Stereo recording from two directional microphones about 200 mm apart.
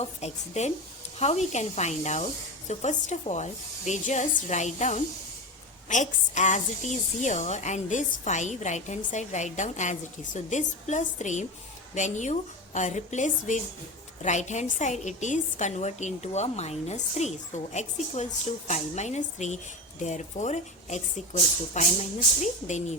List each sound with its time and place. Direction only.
0.0 s a woman's voice: 35° left (ahead or behind)